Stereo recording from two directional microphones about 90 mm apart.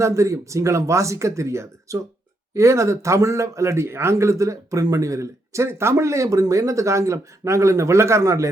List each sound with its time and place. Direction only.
0.0 s speech: 35° right (ahead or behind)